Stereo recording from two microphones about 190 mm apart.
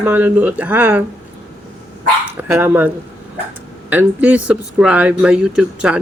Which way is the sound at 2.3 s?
10° right (ahead or behind).